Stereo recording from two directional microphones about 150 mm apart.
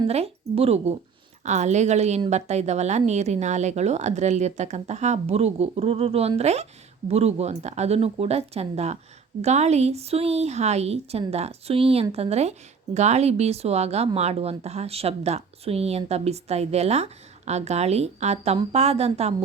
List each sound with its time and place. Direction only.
0.1 s speech: 40° right (ahead or behind)